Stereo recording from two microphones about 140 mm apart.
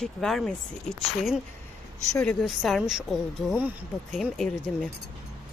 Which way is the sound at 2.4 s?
Centre (ahead or behind).